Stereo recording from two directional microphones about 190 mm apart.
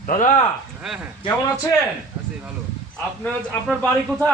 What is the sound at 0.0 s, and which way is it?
Speech, 45° left (ahead or behind).